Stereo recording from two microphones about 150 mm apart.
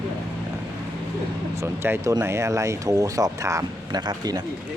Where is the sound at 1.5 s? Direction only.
15° right (ahead or behind).